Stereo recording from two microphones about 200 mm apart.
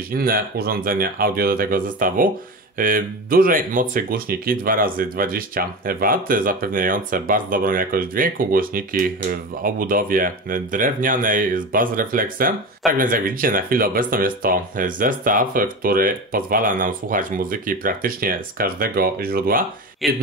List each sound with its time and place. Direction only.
0.1 s speech: 50° right (ahead or behind)
20.0 s speech: centre (ahead or behind)